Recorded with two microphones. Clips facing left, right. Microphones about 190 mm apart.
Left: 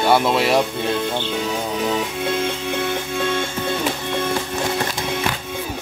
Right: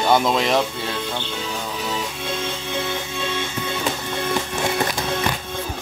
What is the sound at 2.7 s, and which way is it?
Music, 55° left (ahead or behind).